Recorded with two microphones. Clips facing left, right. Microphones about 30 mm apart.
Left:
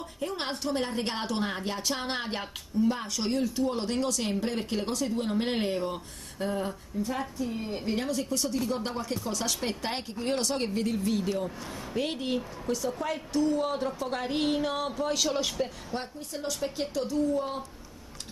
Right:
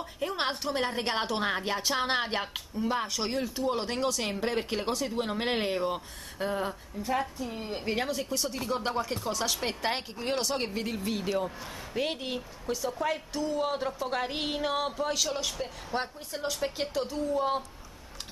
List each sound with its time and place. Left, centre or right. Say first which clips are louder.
0.2 s a woman's voice: right 1 dB; centre
15.9 s a woman's voice: right 2 dB; centre